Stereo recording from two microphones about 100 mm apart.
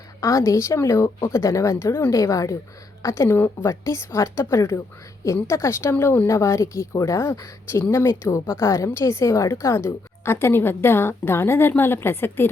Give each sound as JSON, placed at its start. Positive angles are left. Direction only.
{"t": 0.2, "sound": "a woman's voice", "side_deg": 30}